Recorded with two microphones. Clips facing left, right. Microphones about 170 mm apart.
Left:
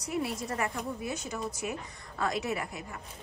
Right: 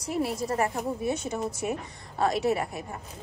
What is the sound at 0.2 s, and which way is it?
A woman's voice, 35° right (ahead or behind).